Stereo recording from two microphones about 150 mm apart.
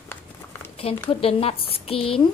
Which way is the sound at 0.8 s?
40° left (ahead or behind).